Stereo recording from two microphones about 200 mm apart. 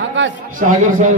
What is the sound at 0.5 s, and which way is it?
Speech, 40° right (ahead or behind).